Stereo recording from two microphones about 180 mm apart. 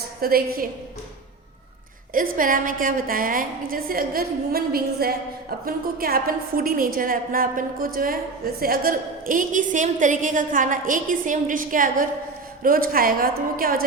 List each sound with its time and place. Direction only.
0.2 s a woman's voice: 55° right (ahead or behind)
2.1 s a woman's voice: 50° right (ahead or behind)